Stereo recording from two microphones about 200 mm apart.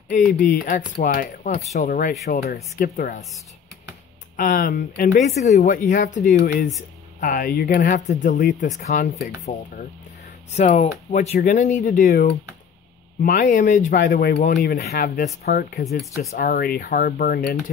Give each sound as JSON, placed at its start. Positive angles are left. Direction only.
{"t": 0.4, "sound": "speech", "side_deg": 40}
{"t": 2.5, "sound": "speech", "side_deg": 45}
{"t": 4.4, "sound": "speech", "side_deg": 40}
{"t": 10.5, "sound": "speech", "side_deg": 35}
{"t": 15.8, "sound": "speech", "side_deg": 0}
{"t": 16.3, "sound": "speech", "side_deg": 45}